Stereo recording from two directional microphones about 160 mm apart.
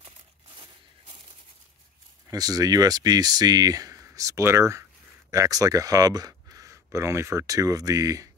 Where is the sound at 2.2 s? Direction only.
25° right (ahead or behind).